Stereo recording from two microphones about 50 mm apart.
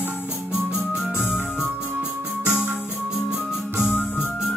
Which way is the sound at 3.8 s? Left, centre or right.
Left.